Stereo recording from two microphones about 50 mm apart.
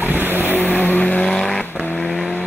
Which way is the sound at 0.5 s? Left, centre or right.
Left.